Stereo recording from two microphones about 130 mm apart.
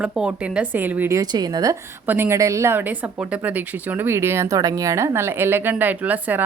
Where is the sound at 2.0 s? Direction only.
15° right (ahead or behind).